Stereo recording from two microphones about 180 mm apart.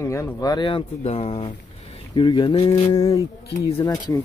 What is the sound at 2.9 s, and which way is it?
Speech, 20° left (ahead or behind).